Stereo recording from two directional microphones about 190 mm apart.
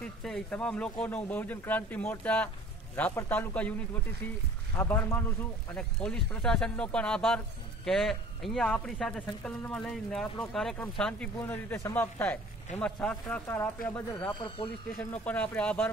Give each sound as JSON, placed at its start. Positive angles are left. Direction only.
{"t": 0.0, "sound": "speech", "side_deg": 5}
{"t": 4.7, "sound": "speech", "side_deg": 10}